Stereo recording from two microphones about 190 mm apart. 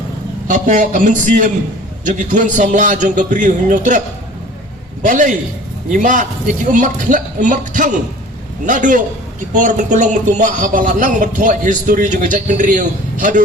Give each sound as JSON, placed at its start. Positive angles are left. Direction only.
{"t": 0.4, "sound": "a man's voice", "side_deg": -45}
{"t": 5.0, "sound": "a man's voice", "side_deg": -40}